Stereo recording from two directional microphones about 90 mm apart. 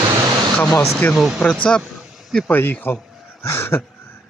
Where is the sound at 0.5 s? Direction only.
20° left (ahead or behind).